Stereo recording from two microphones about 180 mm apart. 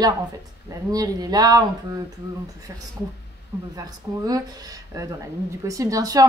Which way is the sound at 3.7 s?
20° right (ahead or behind).